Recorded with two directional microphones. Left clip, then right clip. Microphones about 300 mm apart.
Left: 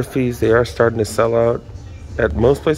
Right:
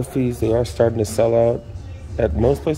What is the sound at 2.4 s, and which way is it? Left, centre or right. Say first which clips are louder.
Speech: left 5 dB; left.